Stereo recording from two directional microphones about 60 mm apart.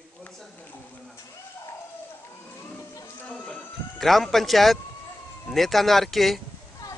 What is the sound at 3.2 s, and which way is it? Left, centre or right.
Music, centre.